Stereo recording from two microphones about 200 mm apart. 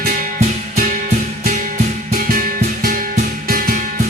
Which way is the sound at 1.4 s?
40° right (ahead or behind).